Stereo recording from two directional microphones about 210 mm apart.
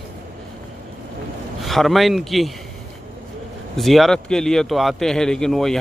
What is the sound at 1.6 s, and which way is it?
Speech, centre (ahead or behind).